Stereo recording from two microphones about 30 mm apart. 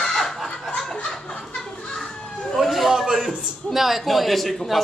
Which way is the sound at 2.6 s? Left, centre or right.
Centre.